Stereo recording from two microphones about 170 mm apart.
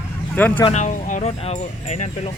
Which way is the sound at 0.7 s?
45° left (ahead or behind).